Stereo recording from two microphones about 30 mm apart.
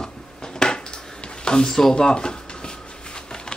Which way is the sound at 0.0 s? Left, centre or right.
Left.